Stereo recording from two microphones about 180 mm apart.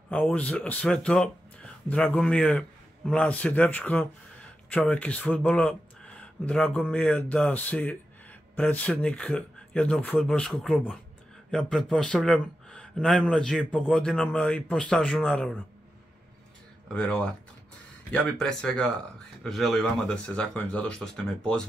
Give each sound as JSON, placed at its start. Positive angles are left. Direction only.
{"t": 0.1, "sound": "speech", "side_deg": 5}
{"t": 16.9, "sound": "speech", "side_deg": 5}